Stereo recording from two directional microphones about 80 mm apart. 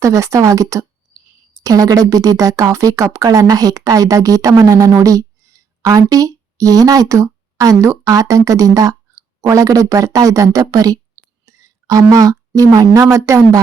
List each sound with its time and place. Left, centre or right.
0.0 s speech: right
11.4 s whispering: right
12.1 s speech: right